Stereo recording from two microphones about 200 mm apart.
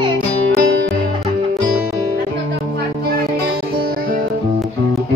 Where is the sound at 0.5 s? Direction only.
60° right (ahead or behind).